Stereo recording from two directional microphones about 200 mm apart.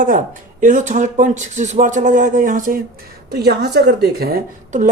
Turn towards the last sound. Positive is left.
turn(degrees=-45)  # may be behind; listen again after turning